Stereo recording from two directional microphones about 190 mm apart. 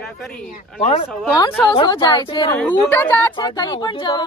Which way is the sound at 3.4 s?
25° left (ahead or behind).